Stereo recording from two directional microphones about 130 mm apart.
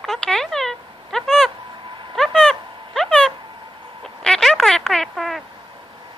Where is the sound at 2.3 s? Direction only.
Centre (ahead or behind).